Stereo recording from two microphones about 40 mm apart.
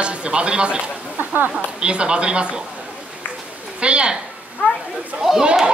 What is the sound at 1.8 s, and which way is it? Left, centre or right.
Speech, right.